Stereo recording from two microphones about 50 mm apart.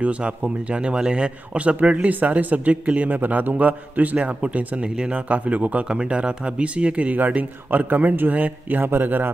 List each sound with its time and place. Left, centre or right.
0.0 s a man's voice: right
4.9 s a man's voice: centre
5.3 s a man's voice: right